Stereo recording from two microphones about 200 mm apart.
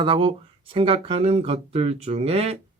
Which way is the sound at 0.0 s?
25° right (ahead or behind).